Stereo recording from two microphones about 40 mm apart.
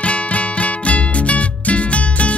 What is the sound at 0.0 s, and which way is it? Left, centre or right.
Music, left.